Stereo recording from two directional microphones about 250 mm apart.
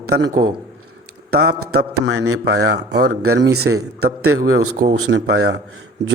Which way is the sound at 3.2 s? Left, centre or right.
Right.